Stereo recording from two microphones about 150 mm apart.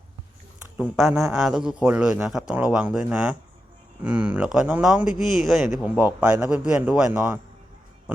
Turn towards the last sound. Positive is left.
turn(degrees=-10)  # may be behind; listen again after turning